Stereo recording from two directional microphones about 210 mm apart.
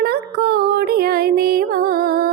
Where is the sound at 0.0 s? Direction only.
50° right (ahead or behind).